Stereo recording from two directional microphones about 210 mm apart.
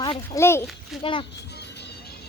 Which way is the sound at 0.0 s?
15° left (ahead or behind).